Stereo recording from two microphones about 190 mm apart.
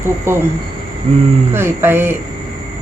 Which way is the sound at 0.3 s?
15° right (ahead or behind).